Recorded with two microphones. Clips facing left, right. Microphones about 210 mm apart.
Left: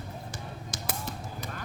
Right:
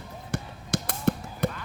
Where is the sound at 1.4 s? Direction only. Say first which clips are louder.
Right 15 dB; 60° right (ahead or behind).